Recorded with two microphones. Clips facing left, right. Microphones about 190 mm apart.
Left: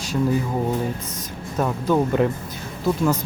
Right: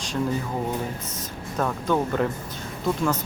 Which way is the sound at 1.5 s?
10° left (ahead or behind).